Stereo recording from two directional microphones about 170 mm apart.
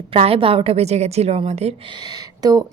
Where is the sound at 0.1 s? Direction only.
35° right (ahead or behind).